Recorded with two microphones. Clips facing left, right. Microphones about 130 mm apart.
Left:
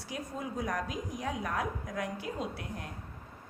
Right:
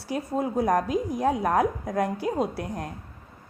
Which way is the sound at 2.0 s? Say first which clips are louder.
Right 11 dB; 40° right (ahead or behind).